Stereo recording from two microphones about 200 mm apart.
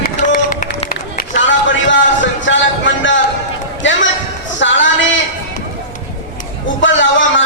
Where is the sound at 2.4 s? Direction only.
65° left (ahead or behind).